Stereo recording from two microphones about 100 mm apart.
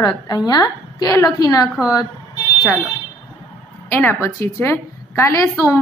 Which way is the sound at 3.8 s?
20° left (ahead or behind).